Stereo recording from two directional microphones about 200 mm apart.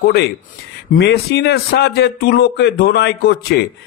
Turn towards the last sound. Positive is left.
turn(degrees=55)  # may be behind; listen again after turning